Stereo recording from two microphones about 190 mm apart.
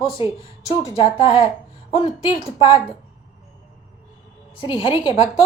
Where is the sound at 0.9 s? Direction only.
25° left (ahead or behind).